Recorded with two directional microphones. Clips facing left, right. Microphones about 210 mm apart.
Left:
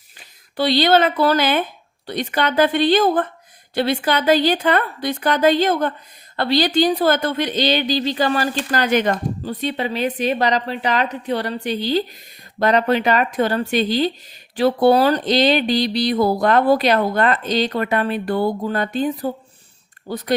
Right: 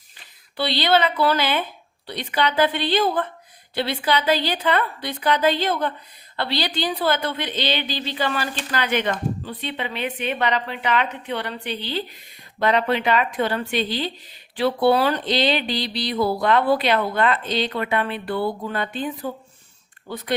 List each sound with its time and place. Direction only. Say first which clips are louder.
0.5 s a woman's voice: left 5 dB; 45° left (ahead or behind)